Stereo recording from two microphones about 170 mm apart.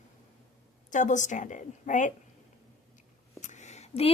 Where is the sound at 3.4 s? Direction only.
45° left (ahead or behind).